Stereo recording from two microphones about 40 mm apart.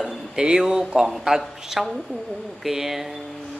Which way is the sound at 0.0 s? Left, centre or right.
Centre.